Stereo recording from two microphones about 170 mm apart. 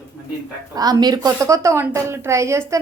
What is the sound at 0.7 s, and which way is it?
A woman's voice, 25° right (ahead or behind).